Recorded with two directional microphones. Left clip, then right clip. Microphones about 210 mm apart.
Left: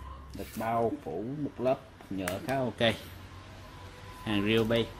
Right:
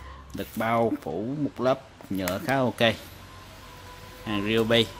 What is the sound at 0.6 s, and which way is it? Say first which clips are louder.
Speech: right 5 dB; 25° right (ahead or behind).